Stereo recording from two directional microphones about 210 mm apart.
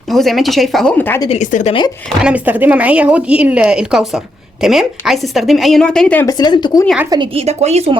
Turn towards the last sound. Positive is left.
turn(degrees=-30)  # may be behind; listen again after turning